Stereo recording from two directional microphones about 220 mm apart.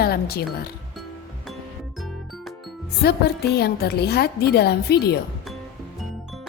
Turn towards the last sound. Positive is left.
turn(degrees=45)  # may be behind; listen again after turning